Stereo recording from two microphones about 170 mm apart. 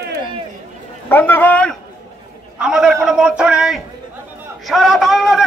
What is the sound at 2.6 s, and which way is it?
Speech, 5° right (ahead or behind).